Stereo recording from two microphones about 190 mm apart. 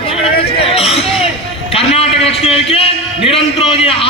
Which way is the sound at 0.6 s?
30° left (ahead or behind).